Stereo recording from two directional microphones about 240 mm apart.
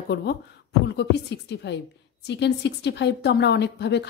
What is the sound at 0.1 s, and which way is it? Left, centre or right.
Speech, left.